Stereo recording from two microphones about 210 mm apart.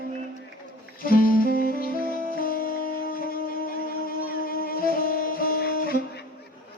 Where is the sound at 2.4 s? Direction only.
45° left (ahead or behind).